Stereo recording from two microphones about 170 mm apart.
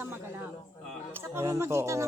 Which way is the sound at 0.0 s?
15° right (ahead or behind).